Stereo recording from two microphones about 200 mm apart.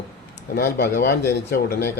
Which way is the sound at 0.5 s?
50° left (ahead or behind).